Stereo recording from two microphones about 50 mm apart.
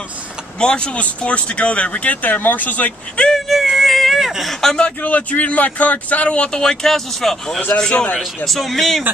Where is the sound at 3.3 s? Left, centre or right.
Centre.